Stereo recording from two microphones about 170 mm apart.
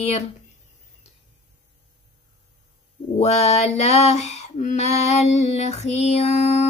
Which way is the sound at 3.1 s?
40° left (ahead or behind).